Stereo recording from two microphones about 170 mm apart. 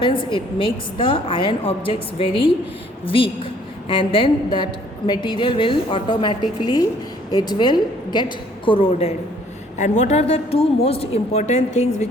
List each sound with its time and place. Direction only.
0.0 s a woman's voice: 30° left (ahead or behind)
3.8 s a woman's voice: 30° left (ahead or behind)
9.7 s a woman's voice: 45° left (ahead or behind)